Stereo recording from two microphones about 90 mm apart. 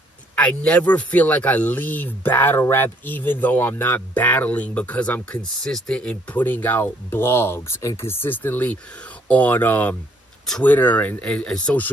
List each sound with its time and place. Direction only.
0.4 s speech: 10° left (ahead or behind)
5.5 s speech: 5° left (ahead or behind)